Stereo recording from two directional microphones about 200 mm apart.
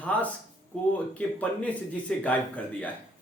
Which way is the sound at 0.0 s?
5° left (ahead or behind).